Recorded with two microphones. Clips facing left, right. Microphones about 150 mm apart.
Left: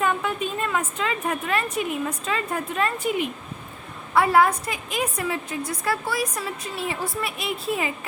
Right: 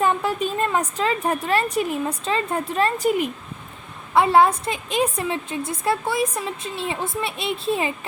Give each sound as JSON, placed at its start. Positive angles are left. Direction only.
{"t": 0.0, "sound": "a woman's voice", "side_deg": -35}
{"t": 4.1, "sound": "a woman's voice", "side_deg": -25}